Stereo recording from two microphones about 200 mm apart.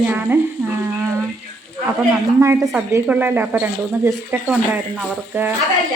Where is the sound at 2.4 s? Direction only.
10° right (ahead or behind).